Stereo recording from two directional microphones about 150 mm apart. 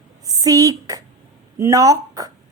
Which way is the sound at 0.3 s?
25° right (ahead or behind).